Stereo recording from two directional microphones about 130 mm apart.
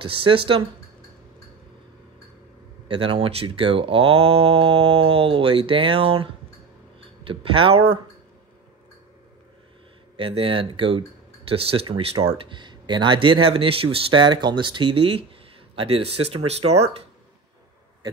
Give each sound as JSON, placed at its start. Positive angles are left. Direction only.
{"t": 0.0, "sound": "speech", "side_deg": -40}
{"t": 2.9, "sound": "speech", "side_deg": -45}
{"t": 7.0, "sound": "a sound", "side_deg": -45}
{"t": 10.1, "sound": "speech", "side_deg": -45}